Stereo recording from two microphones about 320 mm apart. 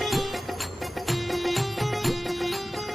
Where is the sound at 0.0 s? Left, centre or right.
Centre.